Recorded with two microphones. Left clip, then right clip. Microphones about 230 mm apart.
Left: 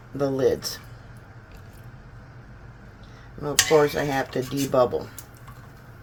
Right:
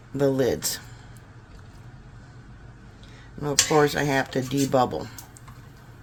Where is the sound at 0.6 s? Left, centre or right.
Right.